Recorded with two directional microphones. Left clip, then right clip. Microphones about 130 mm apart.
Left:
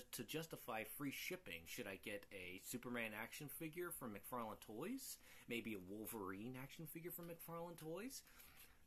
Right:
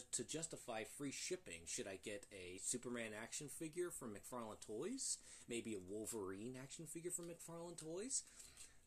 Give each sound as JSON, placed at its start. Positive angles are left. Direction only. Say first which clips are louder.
{"t": 0.1, "sound": "speech", "louder": "right 1 dB", "side_deg": 25}